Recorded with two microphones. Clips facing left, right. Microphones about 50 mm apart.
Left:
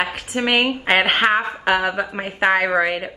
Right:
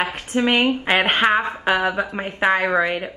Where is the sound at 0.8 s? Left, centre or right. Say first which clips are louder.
Left 3 dB; centre.